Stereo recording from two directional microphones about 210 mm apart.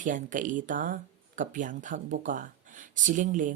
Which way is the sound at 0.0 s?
35° right (ahead or behind).